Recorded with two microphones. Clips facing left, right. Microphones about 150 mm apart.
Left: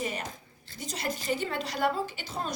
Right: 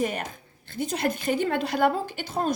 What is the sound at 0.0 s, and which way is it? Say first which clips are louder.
A woman's voice: right 6 dB; 55° right (ahead or behind).